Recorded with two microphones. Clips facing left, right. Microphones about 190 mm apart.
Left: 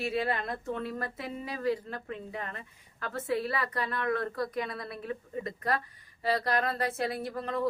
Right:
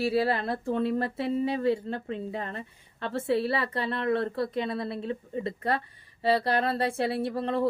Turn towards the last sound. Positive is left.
turn(degrees=-30)  # may be behind; listen again after turning